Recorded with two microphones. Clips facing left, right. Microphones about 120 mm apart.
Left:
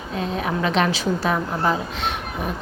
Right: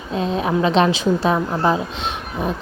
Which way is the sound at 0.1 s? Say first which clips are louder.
Right 5 dB; 25° right (ahead or behind).